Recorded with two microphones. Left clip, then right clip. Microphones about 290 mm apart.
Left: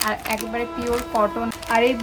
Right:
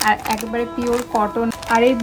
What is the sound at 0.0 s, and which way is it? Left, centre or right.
A woman's voice, centre.